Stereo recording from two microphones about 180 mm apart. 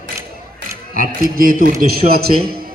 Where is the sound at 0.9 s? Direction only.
50° right (ahead or behind).